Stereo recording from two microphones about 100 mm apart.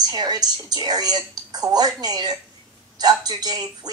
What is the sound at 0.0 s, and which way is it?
A woman's voice, 45° right (ahead or behind).